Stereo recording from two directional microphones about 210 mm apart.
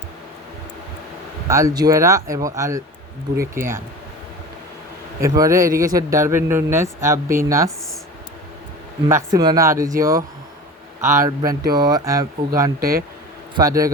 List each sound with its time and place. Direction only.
1.5 s speech: 15° right (ahead or behind)
5.2 s speech: 15° right (ahead or behind)
5.7 s a man's voice: 45° right (ahead or behind)
6.0 s speech: 15° right (ahead or behind)
9.0 s speech: 15° right (ahead or behind)
12.8 s a man's voice: 45° right (ahead or behind)
13.6 s speech: 15° right (ahead or behind)